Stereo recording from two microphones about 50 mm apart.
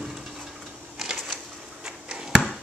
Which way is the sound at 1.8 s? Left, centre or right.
Centre.